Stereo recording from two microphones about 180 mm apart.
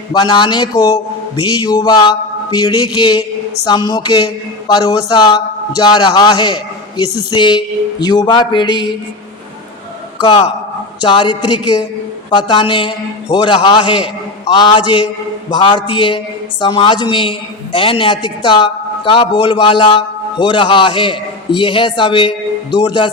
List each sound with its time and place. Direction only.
0.1 s speech: 25° left (ahead or behind)
11.0 s speech: 25° left (ahead or behind)